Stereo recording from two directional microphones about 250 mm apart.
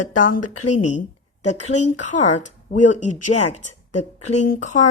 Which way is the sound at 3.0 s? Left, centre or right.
Left.